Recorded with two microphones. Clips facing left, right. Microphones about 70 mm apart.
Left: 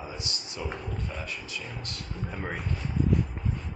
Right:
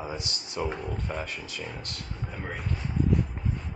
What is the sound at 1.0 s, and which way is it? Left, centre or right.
Speech, right.